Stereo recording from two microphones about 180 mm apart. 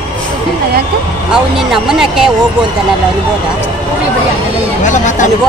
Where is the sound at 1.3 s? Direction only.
5° right (ahead or behind).